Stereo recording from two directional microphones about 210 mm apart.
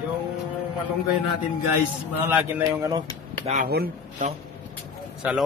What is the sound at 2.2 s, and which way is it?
Speech, 15° right (ahead or behind).